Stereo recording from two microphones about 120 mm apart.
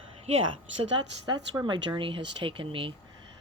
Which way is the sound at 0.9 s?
40° right (ahead or behind).